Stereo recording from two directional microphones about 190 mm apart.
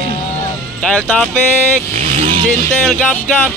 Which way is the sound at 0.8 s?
5° left (ahead or behind).